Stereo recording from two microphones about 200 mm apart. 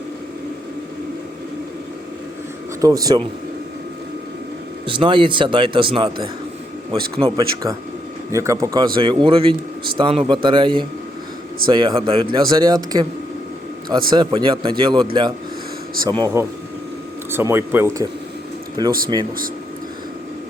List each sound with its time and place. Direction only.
2.8 s speech: 20° right (ahead or behind)
4.9 s speech: 25° right (ahead or behind)
8.3 s speech: 15° right (ahead or behind)
14.1 s speech: 20° right (ahead or behind)